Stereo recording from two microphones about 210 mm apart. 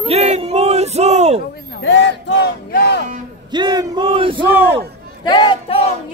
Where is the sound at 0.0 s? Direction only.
30° right (ahead or behind).